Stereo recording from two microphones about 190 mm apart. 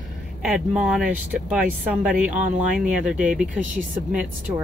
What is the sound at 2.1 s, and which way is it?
Speech, 45° right (ahead or behind).